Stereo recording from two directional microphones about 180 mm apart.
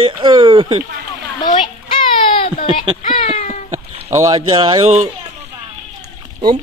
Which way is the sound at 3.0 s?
45° left (ahead or behind).